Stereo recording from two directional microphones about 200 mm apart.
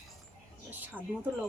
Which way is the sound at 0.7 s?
10° right (ahead or behind).